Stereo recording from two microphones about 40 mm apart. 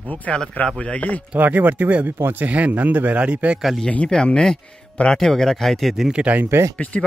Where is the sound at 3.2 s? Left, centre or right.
Right.